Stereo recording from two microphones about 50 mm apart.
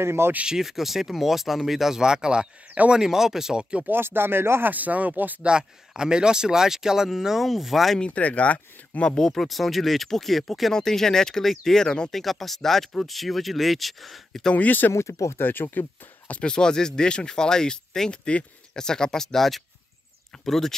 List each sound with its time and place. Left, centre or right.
0.0 s speech: right
0.5 s speech: centre
3.8 s speech: right
4.7 s speech: right
5.4 s speech: centre
8.0 s speech: left
9.1 s speech: centre
12.2 s speech: centre
14.5 s speech: left
14.9 s speech: left
15.3 s speech: left
16.3 s speech: left